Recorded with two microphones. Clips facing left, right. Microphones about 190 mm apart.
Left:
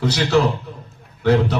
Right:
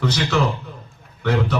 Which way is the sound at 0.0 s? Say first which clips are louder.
Left 3 dB; 35° left (ahead or behind).